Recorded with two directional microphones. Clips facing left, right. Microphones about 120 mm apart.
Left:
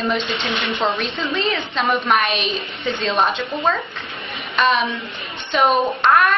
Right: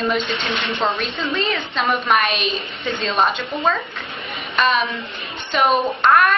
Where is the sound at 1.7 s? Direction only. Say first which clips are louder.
Even; centre (ahead or behind).